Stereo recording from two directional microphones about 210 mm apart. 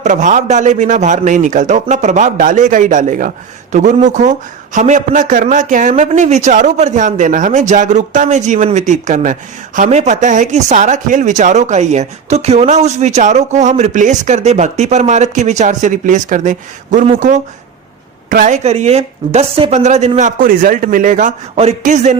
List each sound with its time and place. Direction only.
0.0 s a man's voice: 35° right (ahead or behind)